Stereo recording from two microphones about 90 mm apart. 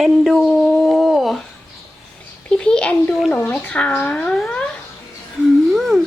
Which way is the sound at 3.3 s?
15° left (ahead or behind).